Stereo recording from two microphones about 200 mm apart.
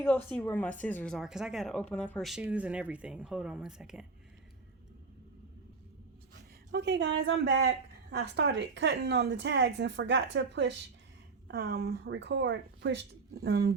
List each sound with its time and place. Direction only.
0.0 s speech: 10° left (ahead or behind)
6.7 s a woman's voice: 60° right (ahead or behind)